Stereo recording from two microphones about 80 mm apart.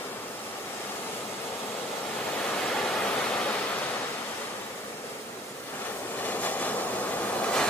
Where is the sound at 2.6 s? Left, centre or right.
Centre.